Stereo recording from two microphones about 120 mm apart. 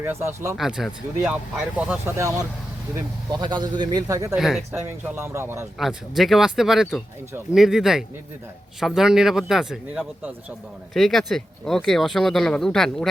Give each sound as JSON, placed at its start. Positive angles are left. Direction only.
{"t": 0.0, "sound": "speech", "side_deg": -20}
{"t": 0.5, "sound": "speech", "side_deg": 0}
{"t": 2.1, "sound": "speech", "side_deg": -30}
{"t": 3.4, "sound": "speech", "side_deg": -40}
{"t": 4.4, "sound": "speech", "side_deg": -5}
{"t": 4.7, "sound": "speech", "side_deg": -20}
{"t": 5.8, "sound": "speech", "side_deg": 0}